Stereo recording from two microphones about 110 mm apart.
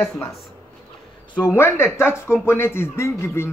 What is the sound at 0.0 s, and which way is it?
Speech, 25° left (ahead or behind).